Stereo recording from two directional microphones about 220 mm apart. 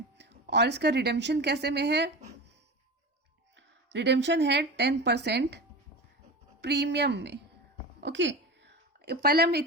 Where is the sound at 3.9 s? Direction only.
55° right (ahead or behind).